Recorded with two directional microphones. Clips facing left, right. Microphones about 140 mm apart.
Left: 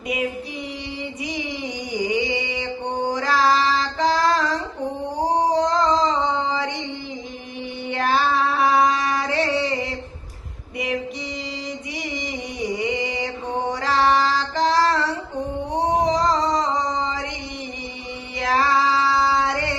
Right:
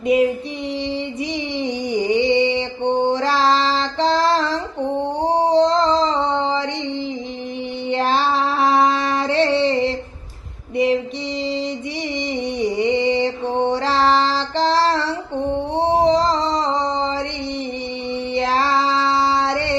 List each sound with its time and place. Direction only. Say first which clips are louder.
0.9 s music: right 6 dB; 30° right (ahead or behind)
5.0 s a sound: right 1 dB; 25° right (ahead or behind)
7.9 s a sound: right 2 dB; 25° right (ahead or behind)
10.8 s female singing: right 8 dB; 30° right (ahead or behind)
12.3 s mantra: right 7 dB; 30° right (ahead or behind)
15.7 s male singing: right 4 dB; 25° right (ahead or behind)
18.3 s child singing: right 1 dB; 30° right (ahead or behind)